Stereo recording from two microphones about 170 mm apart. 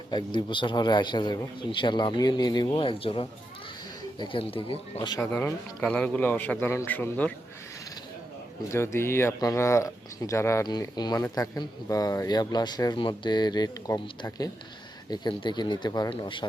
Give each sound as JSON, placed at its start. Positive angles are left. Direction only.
{"t": 0.3, "sound": "speech", "side_deg": 30}
{"t": 5.3, "sound": "speech", "side_deg": 10}
{"t": 8.7, "sound": "speech", "side_deg": 15}